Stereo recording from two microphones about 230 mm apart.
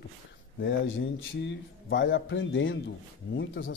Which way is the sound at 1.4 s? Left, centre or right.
Left.